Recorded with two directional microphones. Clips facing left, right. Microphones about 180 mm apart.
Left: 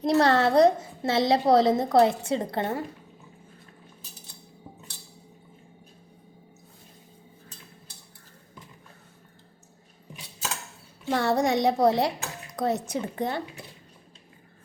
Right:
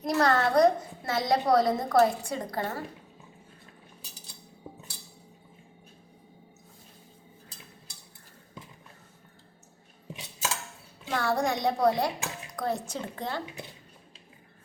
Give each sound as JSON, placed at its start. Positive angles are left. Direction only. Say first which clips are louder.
{"t": 0.0, "sound": "a woman's voice", "louder": "left 4 dB", "side_deg": 30}
{"t": 11.1, "sound": "a woman's voice", "louder": "left 4 dB", "side_deg": 20}